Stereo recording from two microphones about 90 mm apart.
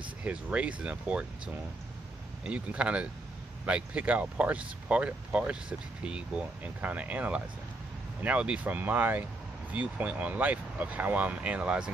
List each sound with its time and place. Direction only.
0.2 s speech: 15° right (ahead or behind)